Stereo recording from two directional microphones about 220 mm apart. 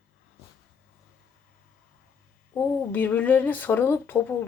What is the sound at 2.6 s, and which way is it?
Speech, 5° left (ahead or behind).